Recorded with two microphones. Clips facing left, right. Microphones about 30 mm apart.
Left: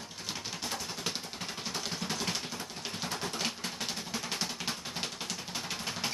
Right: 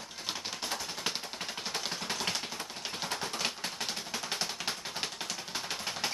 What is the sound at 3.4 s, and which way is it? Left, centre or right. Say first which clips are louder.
Music: right 1 dB; centre.